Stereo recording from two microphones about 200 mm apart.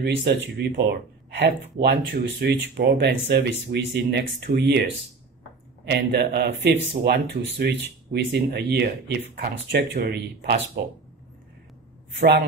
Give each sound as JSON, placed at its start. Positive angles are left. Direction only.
{"t": 0.6, "sound": "speech", "side_deg": -55}
{"t": 5.9, "sound": "speech", "side_deg": -55}
{"t": 12.2, "sound": "speech", "side_deg": -55}